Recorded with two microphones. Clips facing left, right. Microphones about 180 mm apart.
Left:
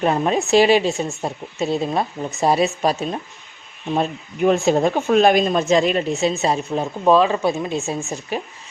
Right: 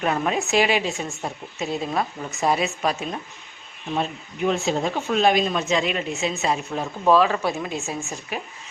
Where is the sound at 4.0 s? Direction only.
50° left (ahead or behind); by 6.6 s 35° left (ahead or behind).